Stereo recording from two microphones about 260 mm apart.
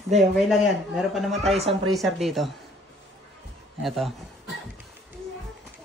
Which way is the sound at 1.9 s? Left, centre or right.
Centre.